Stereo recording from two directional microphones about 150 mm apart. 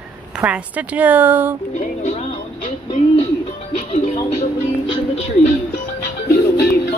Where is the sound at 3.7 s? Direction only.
50° left (ahead or behind).